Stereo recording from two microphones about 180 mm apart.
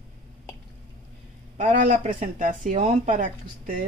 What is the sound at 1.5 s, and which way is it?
Speech, 45° right (ahead or behind).